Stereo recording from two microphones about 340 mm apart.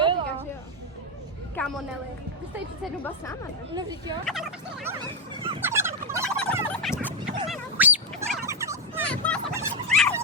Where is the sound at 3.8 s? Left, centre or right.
Centre.